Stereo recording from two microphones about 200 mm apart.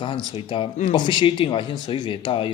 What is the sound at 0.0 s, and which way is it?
Speech, 25° left (ahead or behind).